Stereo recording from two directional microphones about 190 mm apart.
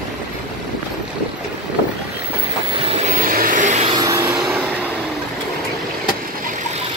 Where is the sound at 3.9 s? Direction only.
20° right (ahead or behind).